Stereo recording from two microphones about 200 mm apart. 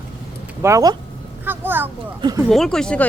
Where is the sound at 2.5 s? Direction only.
Centre (ahead or behind).